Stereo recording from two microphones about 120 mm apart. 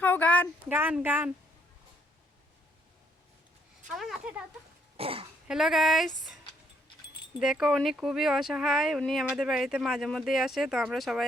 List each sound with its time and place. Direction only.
0.0 s a sound: 15° left (ahead or behind)
0.7 s speech: 15° right (ahead or behind)
3.8 s speech: centre (ahead or behind)
4.9 s speech: 50° right (ahead or behind)
5.5 s speech: centre (ahead or behind)
7.3 s speech: 5° right (ahead or behind)